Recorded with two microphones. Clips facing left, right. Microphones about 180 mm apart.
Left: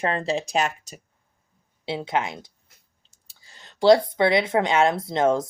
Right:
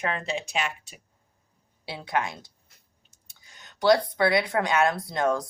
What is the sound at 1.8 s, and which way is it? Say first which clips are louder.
Speech: left 3 dB; 20° left (ahead or behind).